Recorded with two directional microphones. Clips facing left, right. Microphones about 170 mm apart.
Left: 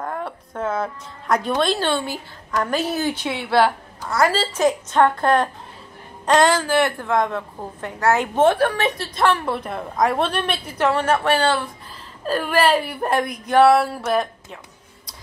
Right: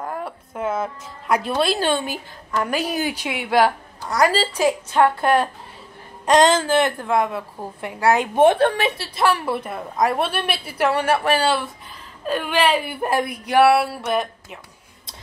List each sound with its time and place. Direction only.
0.2 s speech: 5° right (ahead or behind)
6.2 s speech: 20° right (ahead or behind)
9.0 s speech: 10° right (ahead or behind)